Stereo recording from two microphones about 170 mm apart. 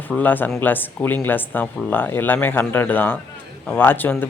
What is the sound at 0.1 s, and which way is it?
A man's voice, 10° left (ahead or behind).